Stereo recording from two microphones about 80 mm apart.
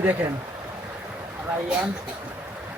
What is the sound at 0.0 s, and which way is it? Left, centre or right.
Speech, right.